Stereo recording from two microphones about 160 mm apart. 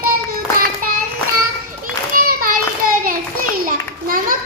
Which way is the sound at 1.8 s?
60° right (ahead or behind).